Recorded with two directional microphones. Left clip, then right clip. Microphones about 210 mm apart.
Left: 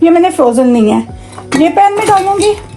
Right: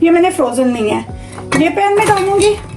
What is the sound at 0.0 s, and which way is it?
A woman's voice, 40° left (ahead or behind).